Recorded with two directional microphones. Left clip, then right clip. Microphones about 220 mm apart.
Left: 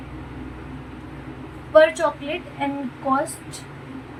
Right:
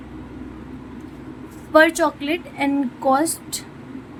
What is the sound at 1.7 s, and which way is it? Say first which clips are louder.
Speech: even; 45° right (ahead or behind).